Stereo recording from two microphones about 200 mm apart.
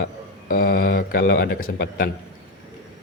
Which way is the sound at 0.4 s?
45° left (ahead or behind).